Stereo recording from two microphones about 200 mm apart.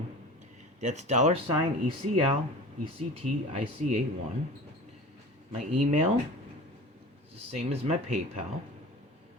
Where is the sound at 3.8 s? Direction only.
35° right (ahead or behind).